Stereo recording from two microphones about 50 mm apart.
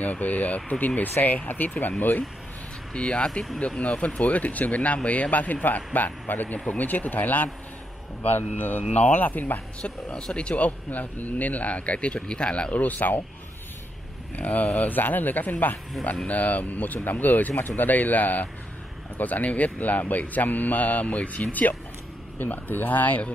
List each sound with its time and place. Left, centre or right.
0.0 s speech: left
2.9 s speech: centre; by 9.6 s left
9.8 s speech: left
12.7 s speech: left
14.3 s speech: left